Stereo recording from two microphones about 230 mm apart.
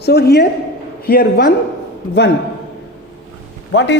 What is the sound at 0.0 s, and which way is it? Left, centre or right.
A woman's voice, left.